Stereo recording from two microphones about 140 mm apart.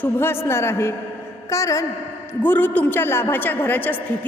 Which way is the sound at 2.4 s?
15° left (ahead or behind).